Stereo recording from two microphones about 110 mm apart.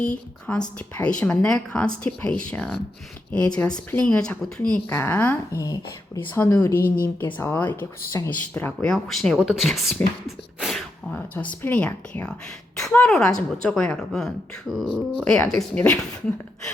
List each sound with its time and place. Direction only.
0.0 s speech: 10° left (ahead or behind)
4.9 s speech: 20° left (ahead or behind); by 10.8 s centre (ahead or behind)
11.1 s speech: 10° left (ahead or behind)